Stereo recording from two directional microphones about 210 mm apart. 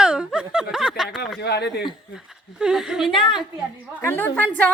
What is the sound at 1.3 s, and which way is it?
Speech, 50° left (ahead or behind).